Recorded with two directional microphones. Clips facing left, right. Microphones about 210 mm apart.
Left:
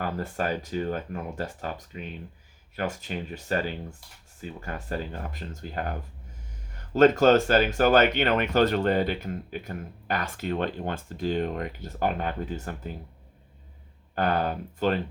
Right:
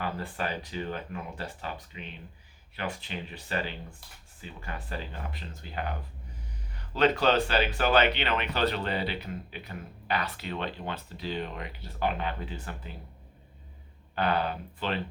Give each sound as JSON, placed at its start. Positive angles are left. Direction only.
{"t": 0.0, "sound": "speech", "side_deg": 45}
{"t": 14.2, "sound": "speech", "side_deg": 45}